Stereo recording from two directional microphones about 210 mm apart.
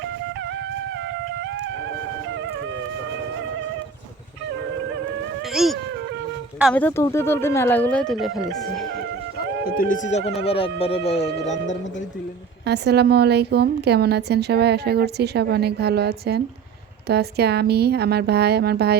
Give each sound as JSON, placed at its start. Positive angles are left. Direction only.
{"t": 5.5, "sound": "speech", "side_deg": 0}
{"t": 6.7, "sound": "speech", "side_deg": 10}
{"t": 9.6, "sound": "speech", "side_deg": 40}
{"t": 12.6, "sound": "a woman's voice", "side_deg": -50}